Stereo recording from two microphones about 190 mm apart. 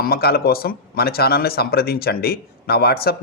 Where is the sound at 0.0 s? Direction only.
55° left (ahead or behind).